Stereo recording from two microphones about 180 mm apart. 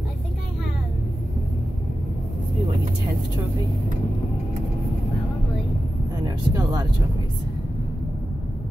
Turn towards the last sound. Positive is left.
turn(degrees=-20)  # may be behind; listen again after turning